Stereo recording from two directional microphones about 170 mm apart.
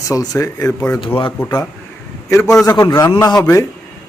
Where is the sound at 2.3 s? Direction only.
20° left (ahead or behind).